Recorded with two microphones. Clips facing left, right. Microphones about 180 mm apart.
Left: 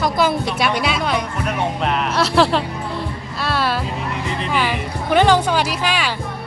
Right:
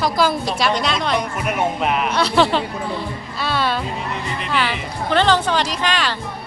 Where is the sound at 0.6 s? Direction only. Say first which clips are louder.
Even; 5° left (ahead or behind).